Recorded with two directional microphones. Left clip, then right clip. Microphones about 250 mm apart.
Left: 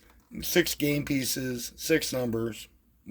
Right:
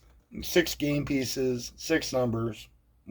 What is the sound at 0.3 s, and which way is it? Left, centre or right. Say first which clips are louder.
Speech: even; left.